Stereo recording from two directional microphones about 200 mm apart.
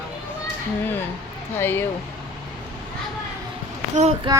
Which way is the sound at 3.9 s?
30° right (ahead or behind).